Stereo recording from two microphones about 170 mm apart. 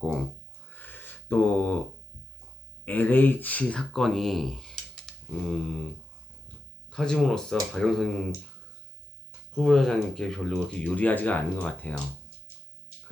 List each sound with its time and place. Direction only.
0.7 s a sound: 10° left (ahead or behind)
2.8 s speech: 10° left (ahead or behind)
6.9 s speech: 5° left (ahead or behind)
9.6 s speech: 5° left (ahead or behind)